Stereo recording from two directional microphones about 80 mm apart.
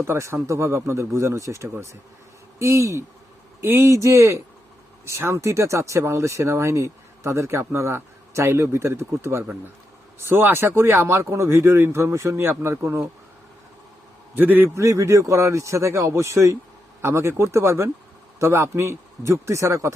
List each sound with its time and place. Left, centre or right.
0.0 s speech: right
14.3 s a man's voice: right
14.8 s speech: right